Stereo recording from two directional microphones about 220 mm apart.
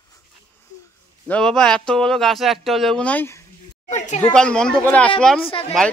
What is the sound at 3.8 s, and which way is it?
Speech, 30° left (ahead or behind).